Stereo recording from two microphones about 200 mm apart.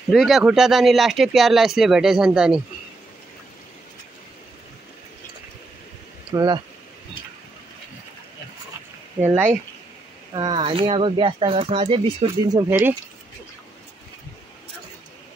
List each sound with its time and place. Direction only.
0.1 s speech: centre (ahead or behind)
6.3 s speech: 20° right (ahead or behind)
9.2 s speech: 10° right (ahead or behind)
10.3 s speech: 25° right (ahead or behind)